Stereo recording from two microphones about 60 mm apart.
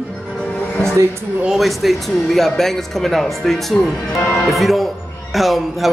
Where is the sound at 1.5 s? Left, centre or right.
Centre.